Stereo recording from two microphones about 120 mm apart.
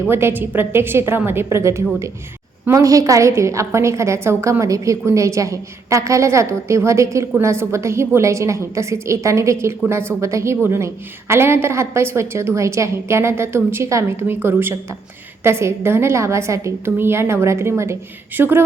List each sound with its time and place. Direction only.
0.1 s a woman's voice: 20° right (ahead or behind)